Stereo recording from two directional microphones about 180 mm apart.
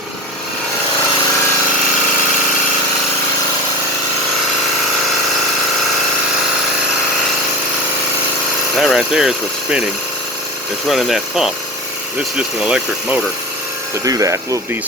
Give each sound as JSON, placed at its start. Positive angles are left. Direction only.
{"t": 8.8, "sound": "a sound", "side_deg": 0}
{"t": 10.8, "sound": "speech", "side_deg": 0}
{"t": 14.0, "sound": "speech", "side_deg": -20}